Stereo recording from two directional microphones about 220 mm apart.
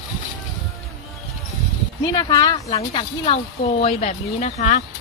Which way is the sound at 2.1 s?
20° left (ahead or behind).